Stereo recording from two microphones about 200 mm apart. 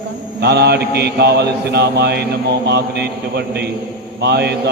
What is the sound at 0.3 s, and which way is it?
A man's voice, 55° right (ahead or behind).